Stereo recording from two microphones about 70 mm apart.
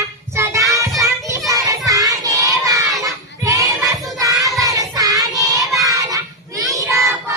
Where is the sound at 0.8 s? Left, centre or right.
Right.